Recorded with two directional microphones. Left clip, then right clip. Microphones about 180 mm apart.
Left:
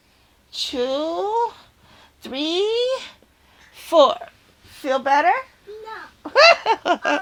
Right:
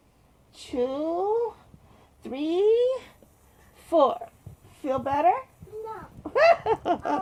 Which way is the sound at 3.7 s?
25° left (ahead or behind).